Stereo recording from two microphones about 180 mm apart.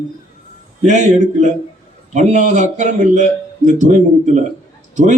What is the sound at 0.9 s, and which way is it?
A man's voice, 40° right (ahead or behind).